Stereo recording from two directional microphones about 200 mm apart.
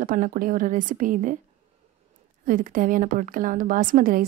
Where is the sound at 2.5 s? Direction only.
40° right (ahead or behind).